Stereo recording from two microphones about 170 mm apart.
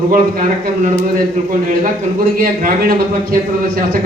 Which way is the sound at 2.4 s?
55° right (ahead or behind).